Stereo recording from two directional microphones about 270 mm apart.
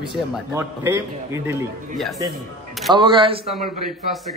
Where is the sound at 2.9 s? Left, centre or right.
Centre.